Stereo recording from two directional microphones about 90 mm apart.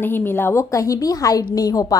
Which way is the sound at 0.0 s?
25° left (ahead or behind).